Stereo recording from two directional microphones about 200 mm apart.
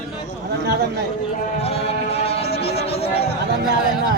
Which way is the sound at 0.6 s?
55° right (ahead or behind).